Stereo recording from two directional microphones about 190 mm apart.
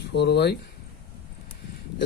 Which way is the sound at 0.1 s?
60° left (ahead or behind).